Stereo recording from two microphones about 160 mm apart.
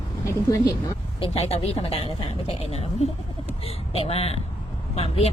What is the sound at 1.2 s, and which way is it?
Speech, 40° left (ahead or behind).